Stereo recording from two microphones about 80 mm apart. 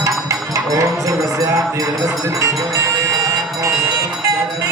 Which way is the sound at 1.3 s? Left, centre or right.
Right.